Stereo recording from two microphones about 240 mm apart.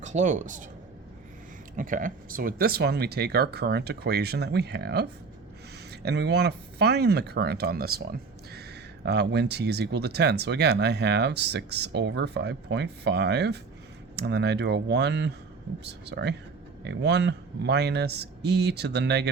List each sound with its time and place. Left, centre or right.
0.0 s speech: right
1.7 s speech: right